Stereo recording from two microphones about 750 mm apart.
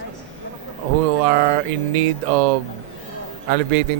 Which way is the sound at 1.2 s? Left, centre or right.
Right.